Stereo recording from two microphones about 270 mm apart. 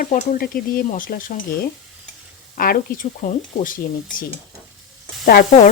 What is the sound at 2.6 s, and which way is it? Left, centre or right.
A woman's voice, left.